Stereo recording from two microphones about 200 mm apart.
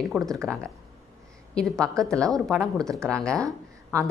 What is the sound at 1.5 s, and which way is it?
A woman's voice, 5° left (ahead or behind).